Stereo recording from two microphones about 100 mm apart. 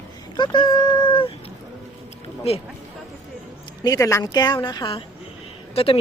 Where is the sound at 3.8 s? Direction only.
35° left (ahead or behind).